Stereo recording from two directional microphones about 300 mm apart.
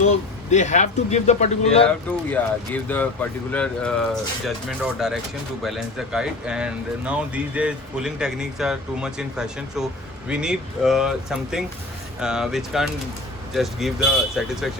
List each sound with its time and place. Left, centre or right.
0.0 s speech: left
2.0 s speech: centre